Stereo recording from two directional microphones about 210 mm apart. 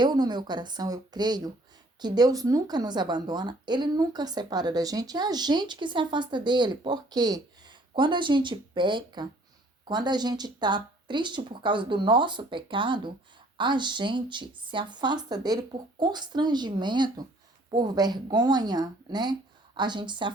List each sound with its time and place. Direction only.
0.0 s a woman's voice: 20° right (ahead or behind)